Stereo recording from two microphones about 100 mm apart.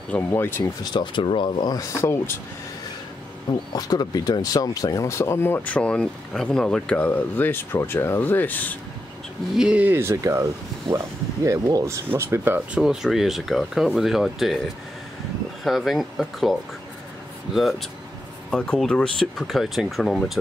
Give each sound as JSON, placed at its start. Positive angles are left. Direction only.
{"t": 0.1, "sound": "speech", "side_deg": 25}
{"t": 0.9, "sound": "speech", "side_deg": 55}
{"t": 3.7, "sound": "speech", "side_deg": 40}
{"t": 9.6, "sound": "speech", "side_deg": -15}
{"t": 12.5, "sound": "speech", "side_deg": -10}
{"t": 15.6, "sound": "speech", "side_deg": 0}
{"t": 17.6, "sound": "speech", "side_deg": 0}